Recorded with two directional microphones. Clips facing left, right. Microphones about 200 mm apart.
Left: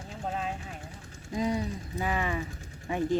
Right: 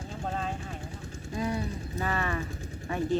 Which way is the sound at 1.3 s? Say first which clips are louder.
Left 2 dB; 15° left (ahead or behind).